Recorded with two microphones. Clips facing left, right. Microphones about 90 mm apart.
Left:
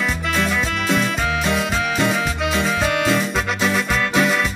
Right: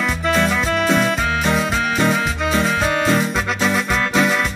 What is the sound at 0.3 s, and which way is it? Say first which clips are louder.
Music: right 5 dB; 40° right (ahead or behind).